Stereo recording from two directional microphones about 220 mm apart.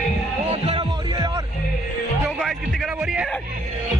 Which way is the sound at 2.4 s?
Centre (ahead or behind).